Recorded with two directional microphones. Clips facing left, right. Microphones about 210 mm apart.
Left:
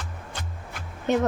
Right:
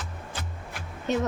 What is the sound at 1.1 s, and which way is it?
Speech, 55° left (ahead or behind).